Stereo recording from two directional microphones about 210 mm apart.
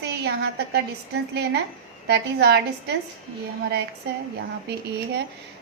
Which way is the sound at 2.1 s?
50° right (ahead or behind).